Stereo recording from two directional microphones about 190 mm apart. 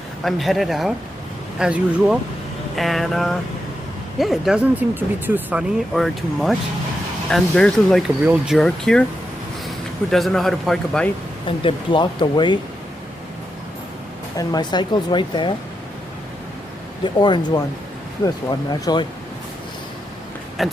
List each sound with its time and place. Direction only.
0.3 s speech: centre (ahead or behind)
8.2 s speech: 10° right (ahead or behind)
8.5 s speech: 5° left (ahead or behind)
10.1 s speech: centre (ahead or behind)
11.4 s speech: 25° left (ahead or behind)
14.3 s speech: 20° left (ahead or behind)
17.0 s speech: 25° left (ahead or behind)
20.6 s speech: centre (ahead or behind)